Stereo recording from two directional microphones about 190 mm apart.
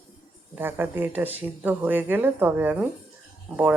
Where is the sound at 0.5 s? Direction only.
10° right (ahead or behind).